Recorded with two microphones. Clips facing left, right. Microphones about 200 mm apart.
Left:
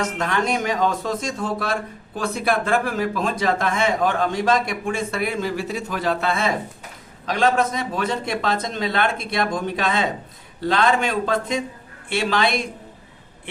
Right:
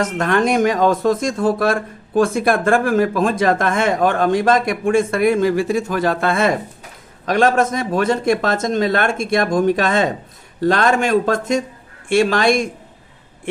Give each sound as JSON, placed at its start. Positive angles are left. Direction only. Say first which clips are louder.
{"t": 0.0, "sound": "speech", "louder": "right 6 dB", "side_deg": -50}